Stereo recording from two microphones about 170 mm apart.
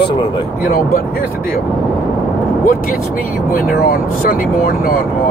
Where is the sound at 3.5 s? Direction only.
60° left (ahead or behind).